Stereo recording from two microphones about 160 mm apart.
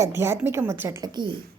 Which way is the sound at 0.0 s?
15° right (ahead or behind).